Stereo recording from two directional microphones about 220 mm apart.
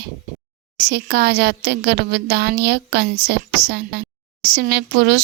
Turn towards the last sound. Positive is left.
turn(degrees=-50)  # may be behind; listen again after turning